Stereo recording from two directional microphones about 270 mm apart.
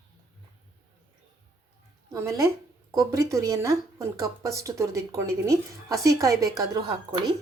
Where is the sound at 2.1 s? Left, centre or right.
Centre.